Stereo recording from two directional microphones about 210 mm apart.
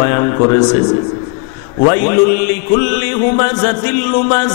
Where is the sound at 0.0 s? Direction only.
20° left (ahead or behind).